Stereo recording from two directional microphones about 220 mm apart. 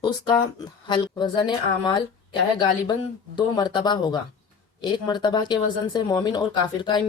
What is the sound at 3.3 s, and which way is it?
Speech, 20° left (ahead or behind).